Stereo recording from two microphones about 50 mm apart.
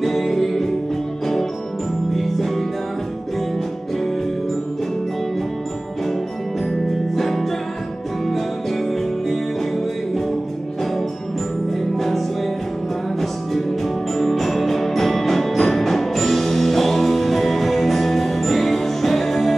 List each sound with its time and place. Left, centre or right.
0.0 s music: centre
7.2 s music: centre
11.7 s music: centre